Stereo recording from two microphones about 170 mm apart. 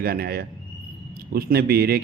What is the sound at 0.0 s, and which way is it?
A man's voice, 65° right (ahead or behind).